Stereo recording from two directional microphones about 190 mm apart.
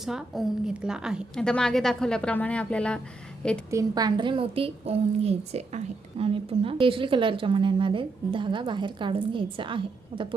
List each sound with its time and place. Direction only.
0.0 s a woman's voice: centre (ahead or behind)
3.7 s a woman's voice: 20° right (ahead or behind)